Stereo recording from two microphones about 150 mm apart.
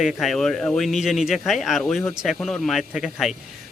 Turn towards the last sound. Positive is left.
turn(degrees=0)  # may be behind; listen again after turning